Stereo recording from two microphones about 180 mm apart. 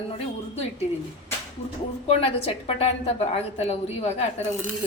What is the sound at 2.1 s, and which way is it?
A woman's voice, 35° left (ahead or behind).